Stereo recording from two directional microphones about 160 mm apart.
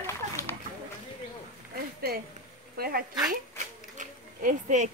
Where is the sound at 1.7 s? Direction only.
70° right (ahead or behind).